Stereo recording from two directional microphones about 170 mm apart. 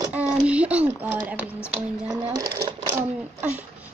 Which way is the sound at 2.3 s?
25° right (ahead or behind).